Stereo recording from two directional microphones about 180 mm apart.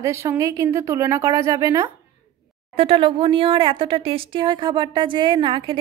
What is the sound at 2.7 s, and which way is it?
A woman's voice, 30° right (ahead or behind).